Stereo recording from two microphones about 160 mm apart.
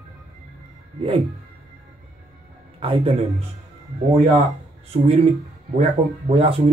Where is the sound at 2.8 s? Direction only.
35° right (ahead or behind).